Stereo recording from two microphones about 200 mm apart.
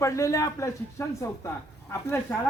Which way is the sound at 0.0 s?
15° left (ahead or behind).